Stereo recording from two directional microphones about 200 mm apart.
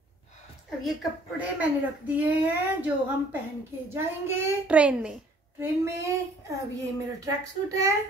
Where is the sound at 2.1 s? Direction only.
10° right (ahead or behind).